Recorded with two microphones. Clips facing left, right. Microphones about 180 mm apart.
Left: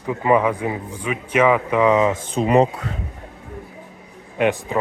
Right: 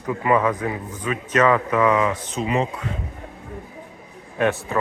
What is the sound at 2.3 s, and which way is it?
Speech, 40° left (ahead or behind).